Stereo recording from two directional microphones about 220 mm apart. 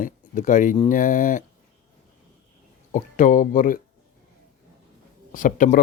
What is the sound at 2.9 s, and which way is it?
Speech, 35° left (ahead or behind).